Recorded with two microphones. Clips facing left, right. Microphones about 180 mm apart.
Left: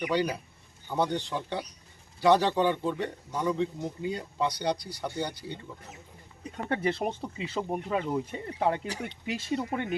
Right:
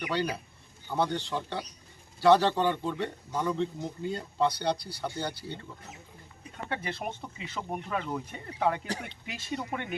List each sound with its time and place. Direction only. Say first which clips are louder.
0.1 s speech: even; 15° left (ahead or behind)
6.7 s speech: left 6 dB; 35° left (ahead or behind)